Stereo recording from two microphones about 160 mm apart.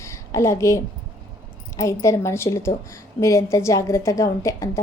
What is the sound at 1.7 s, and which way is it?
A woman's voice, 20° left (ahead or behind).